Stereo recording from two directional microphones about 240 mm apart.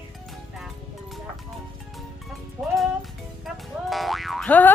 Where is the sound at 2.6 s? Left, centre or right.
Centre.